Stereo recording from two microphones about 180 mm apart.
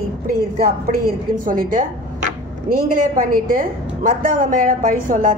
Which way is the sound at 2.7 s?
50° right (ahead or behind).